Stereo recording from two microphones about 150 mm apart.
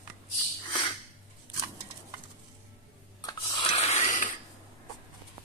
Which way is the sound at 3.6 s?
45° left (ahead or behind).